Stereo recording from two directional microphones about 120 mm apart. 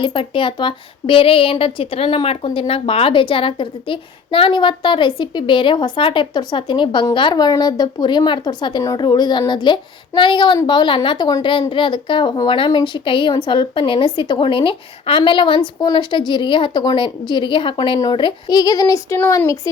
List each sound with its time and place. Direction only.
0.0 s speech: 45° left (ahead or behind)
11.7 s speech: 45° left (ahead or behind); by 19.7 s 25° left (ahead or behind)